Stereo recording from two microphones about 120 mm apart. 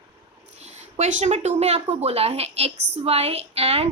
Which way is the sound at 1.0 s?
75° right (ahead or behind).